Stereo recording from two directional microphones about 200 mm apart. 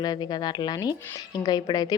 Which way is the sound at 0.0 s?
20° left (ahead or behind).